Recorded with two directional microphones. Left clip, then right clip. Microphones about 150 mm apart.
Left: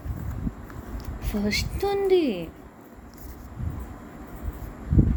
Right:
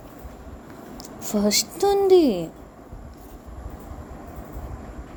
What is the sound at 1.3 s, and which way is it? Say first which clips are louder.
A woman's voice: right 6 dB; 45° right (ahead or behind).